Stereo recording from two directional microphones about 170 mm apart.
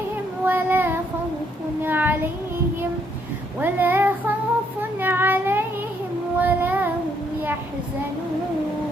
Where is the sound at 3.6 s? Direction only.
10° right (ahead or behind).